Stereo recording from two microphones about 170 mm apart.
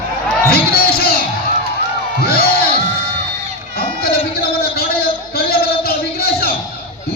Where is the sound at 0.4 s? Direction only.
65° left (ahead or behind).